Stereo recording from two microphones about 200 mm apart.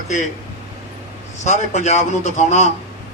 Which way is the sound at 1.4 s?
35° left (ahead or behind).